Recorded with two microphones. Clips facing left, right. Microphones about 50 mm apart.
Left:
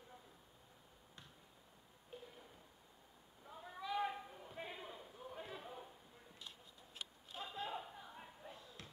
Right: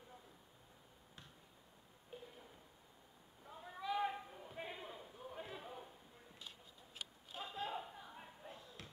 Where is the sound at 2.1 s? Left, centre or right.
Centre.